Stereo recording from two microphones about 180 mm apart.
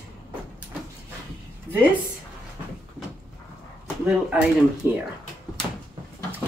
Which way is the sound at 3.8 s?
5° right (ahead or behind).